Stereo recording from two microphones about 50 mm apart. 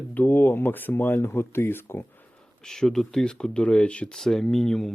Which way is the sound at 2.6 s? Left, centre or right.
Centre.